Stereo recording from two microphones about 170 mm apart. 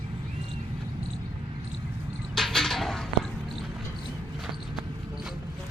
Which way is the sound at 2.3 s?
Centre (ahead or behind).